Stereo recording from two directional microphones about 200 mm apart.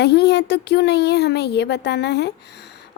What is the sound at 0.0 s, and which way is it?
A woman's voice, 55° left (ahead or behind).